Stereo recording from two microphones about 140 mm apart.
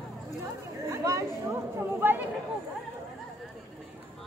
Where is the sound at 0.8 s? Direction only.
20° right (ahead or behind).